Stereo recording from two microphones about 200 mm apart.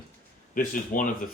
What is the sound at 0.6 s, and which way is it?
Speech, 40° left (ahead or behind).